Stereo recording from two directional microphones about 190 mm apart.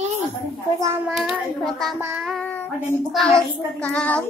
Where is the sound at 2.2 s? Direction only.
5° left (ahead or behind).